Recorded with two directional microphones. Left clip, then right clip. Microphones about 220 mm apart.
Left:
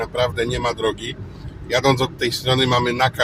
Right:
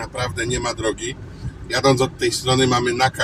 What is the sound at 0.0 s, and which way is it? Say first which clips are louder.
Speech: left 4 dB; 15° left (ahead or behind).